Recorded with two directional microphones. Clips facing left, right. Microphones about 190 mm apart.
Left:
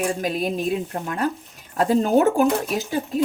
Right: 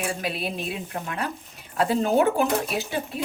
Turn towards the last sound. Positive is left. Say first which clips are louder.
# left 4 dB
turn(degrees=40)  # may be behind; listen again after turning